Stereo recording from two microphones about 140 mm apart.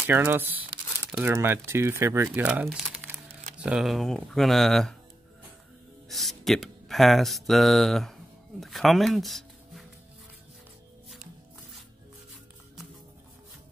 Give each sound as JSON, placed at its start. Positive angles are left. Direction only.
{"t": 0.0, "sound": "speech", "side_deg": -15}
{"t": 3.6, "sound": "speech", "side_deg": -5}
{"t": 6.0, "sound": "mantra", "side_deg": 0}
{"t": 8.5, "sound": "speech", "side_deg": 0}